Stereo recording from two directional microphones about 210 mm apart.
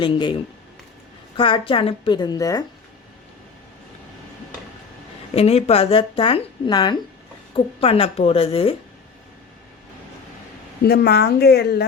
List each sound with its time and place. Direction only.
0.0 s speech: 20° left (ahead or behind)
1.4 s speech: 25° left (ahead or behind)
5.3 s speech: 30° left (ahead or behind)
10.8 s a woman's voice: 50° left (ahead or behind)